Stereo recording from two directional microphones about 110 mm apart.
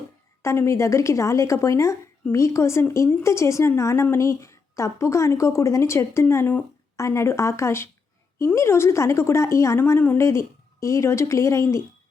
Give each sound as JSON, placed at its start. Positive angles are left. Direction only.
{"t": 0.4, "sound": "a woman's voice", "side_deg": 25}